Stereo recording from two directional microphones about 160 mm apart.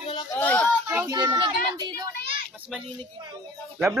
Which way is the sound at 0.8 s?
15° right (ahead or behind).